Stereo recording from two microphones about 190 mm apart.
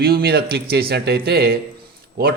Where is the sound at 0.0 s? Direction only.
55° right (ahead or behind).